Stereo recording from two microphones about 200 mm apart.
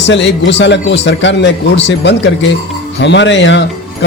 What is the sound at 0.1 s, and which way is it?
A man's voice, 65° left (ahead or behind).